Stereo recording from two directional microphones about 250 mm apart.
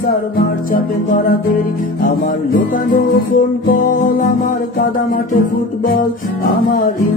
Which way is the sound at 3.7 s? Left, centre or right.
Left.